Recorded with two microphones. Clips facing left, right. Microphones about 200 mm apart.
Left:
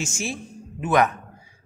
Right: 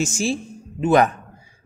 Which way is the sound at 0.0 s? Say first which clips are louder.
Right 7 dB; 35° right (ahead or behind).